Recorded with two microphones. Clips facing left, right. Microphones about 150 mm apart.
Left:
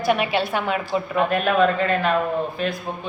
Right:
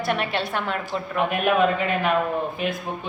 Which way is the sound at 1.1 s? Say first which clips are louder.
Left 1 dB; 10° right (ahead or behind).